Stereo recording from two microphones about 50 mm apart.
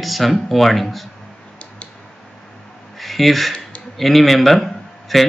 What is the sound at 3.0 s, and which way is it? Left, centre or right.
A man's voice, centre.